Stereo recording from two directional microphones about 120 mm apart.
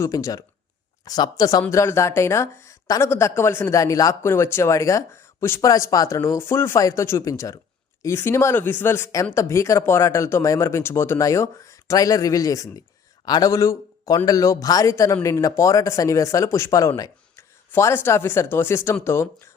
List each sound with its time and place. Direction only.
0.0 s a man's voice: 25° left (ahead or behind)